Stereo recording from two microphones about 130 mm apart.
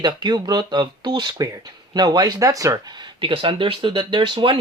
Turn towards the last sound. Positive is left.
turn(degrees=-35)  # may be behind; listen again after turning